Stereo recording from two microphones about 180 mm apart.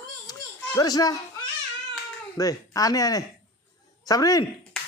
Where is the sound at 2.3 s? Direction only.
20° left (ahead or behind).